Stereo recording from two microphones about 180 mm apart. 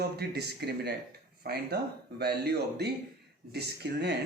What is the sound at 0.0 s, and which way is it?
Speech, 65° right (ahead or behind).